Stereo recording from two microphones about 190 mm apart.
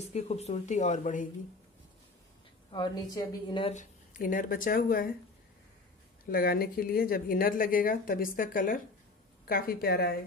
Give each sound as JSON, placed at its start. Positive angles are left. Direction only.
{"t": 0.0, "sound": "speech", "side_deg": 35}
{"t": 2.7, "sound": "speech", "side_deg": 20}
{"t": 3.7, "sound": "a woman's voice", "side_deg": 45}
{"t": 6.3, "sound": "a woman's voice", "side_deg": 50}